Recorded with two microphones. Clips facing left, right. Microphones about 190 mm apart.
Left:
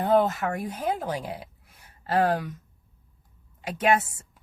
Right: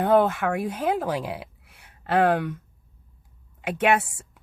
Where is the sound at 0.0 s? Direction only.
55° right (ahead or behind).